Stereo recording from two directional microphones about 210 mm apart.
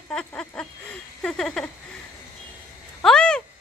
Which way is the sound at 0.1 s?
5° left (ahead or behind).